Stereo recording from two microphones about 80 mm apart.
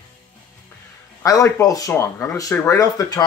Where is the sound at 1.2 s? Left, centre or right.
Left.